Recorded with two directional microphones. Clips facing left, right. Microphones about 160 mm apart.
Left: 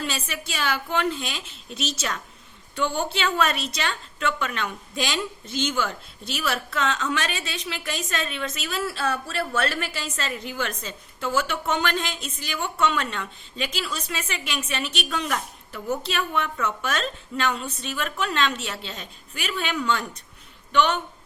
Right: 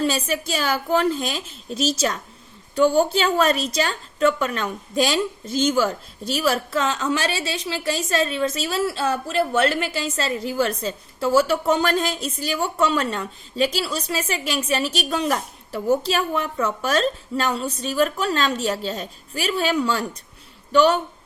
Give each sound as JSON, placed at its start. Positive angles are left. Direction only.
{"t": 0.0, "sound": "a woman's voice", "side_deg": -40}